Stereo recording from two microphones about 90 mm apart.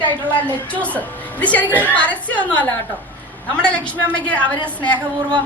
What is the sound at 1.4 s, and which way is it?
A woman's voice, 15° left (ahead or behind).